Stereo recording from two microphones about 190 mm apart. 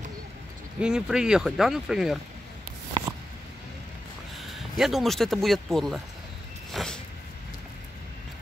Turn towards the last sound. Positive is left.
turn(degrees=5)  # may be behind; listen again after turning